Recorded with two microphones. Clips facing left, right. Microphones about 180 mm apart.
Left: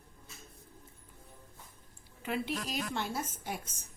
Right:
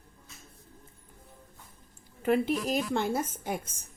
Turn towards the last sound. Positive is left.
turn(degrees=-50)  # may be behind; listen again after turning